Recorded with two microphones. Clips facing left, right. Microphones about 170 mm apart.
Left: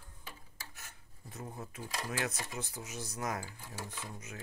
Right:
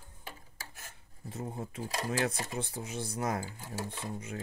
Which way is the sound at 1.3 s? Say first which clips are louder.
Right 6 dB; 30° right (ahead or behind).